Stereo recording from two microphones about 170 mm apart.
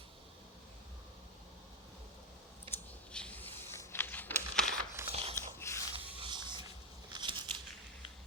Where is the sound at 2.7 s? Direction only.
5° left (ahead or behind).